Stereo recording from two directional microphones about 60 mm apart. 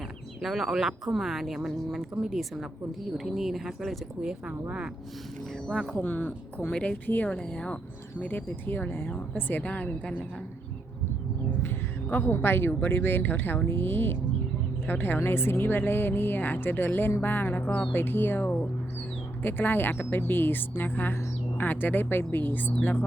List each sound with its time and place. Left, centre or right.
0.4 s speech: centre
4.2 s speech: centre
5.6 s speech: centre
6.0 s speech: left
6.7 s a woman's voice: centre
8.2 s a woman's voice: left
12.0 s speech: left
15.2 s speech: left